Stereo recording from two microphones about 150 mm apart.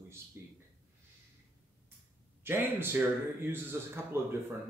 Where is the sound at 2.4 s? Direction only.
15° right (ahead or behind).